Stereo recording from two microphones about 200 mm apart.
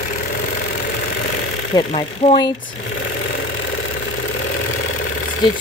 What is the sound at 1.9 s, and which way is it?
Speech, 35° left (ahead or behind).